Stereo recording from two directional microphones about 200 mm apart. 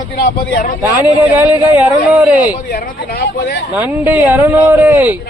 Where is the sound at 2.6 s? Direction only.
50° left (ahead or behind).